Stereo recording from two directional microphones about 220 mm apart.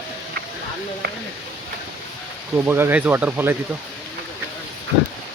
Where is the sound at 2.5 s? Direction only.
10° right (ahead or behind).